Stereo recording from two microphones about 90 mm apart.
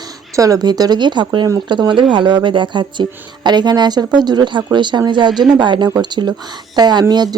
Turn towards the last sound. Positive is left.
turn(degrees=-50)  # may be behind; listen again after turning